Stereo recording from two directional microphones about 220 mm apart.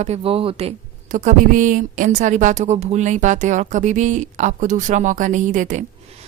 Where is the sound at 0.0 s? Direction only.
30° right (ahead or behind).